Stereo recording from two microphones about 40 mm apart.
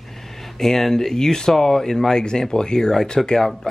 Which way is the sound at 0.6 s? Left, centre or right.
Centre.